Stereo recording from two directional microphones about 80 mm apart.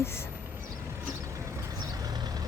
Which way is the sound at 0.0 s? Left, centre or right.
Left.